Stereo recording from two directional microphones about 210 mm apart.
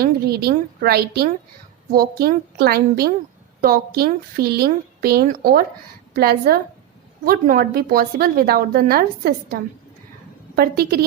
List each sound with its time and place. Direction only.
0.0 s a woman's voice: 50° right (ahead or behind)